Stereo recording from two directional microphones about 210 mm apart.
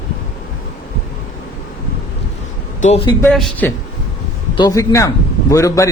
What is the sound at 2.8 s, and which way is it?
Speech, 30° left (ahead or behind).